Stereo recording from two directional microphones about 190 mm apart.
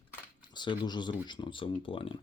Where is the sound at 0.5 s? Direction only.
25° left (ahead or behind).